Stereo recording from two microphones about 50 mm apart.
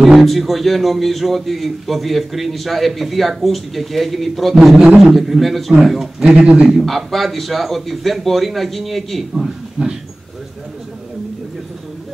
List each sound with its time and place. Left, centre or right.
0.0 s a man's voice: centre
6.3 s speech: right
6.8 s a man's voice: centre
9.3 s a man's voice: centre